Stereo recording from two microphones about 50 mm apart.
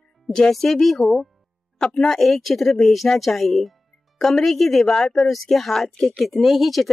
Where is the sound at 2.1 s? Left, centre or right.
Centre.